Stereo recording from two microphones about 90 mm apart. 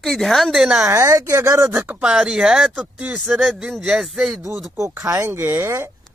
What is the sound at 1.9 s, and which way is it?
Speech, 10° right (ahead or behind).